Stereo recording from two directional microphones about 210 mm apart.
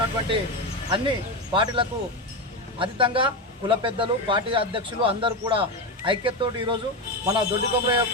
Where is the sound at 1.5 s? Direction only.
25° right (ahead or behind).